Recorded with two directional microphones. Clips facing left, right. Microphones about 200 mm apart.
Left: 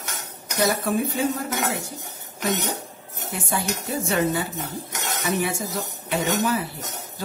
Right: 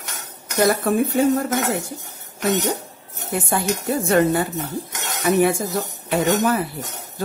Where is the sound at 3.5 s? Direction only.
55° right (ahead or behind).